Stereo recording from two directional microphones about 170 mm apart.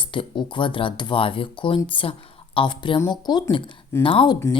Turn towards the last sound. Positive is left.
turn(degrees=30)  # may be behind; listen again after turning